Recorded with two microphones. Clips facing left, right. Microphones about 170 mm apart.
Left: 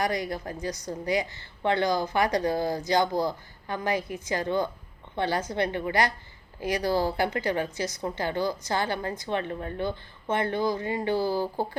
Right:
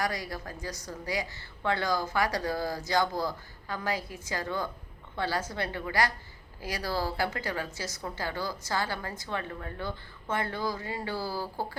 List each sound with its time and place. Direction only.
0.0 s a woman's voice: 20° left (ahead or behind)